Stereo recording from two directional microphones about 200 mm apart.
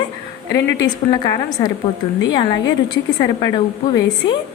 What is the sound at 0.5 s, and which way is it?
A woman's voice, 20° left (ahead or behind).